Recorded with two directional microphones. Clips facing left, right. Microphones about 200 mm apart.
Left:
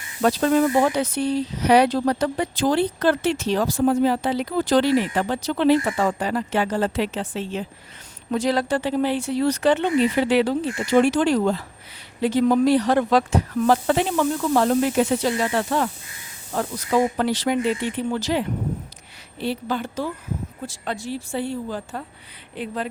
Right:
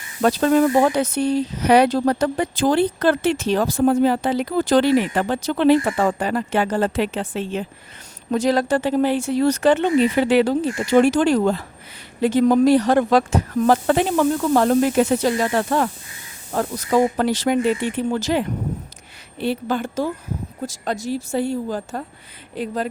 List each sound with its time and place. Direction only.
0.2 s speech: 50° right (ahead or behind)
8.3 s speech: 45° right (ahead or behind)